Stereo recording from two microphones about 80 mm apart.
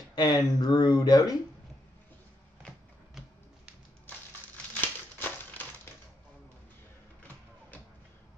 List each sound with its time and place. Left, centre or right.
0.1 s speech: left
4.7 s crumpling: left